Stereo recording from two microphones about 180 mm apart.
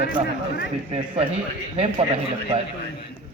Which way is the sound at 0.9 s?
30° right (ahead or behind).